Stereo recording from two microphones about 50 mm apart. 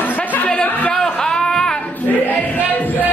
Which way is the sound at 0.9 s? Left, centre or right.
Centre.